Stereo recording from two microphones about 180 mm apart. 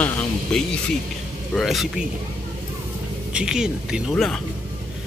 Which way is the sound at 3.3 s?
5° right (ahead or behind).